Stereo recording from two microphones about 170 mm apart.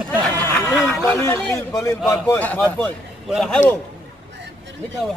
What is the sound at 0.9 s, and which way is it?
A man's voice, 15° left (ahead or behind).